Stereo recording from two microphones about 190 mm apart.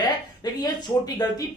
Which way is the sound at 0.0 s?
20° left (ahead or behind).